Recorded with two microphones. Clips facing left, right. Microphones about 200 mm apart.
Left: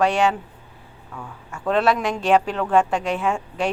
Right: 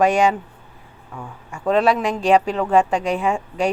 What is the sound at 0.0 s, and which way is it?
Speech, 15° right (ahead or behind).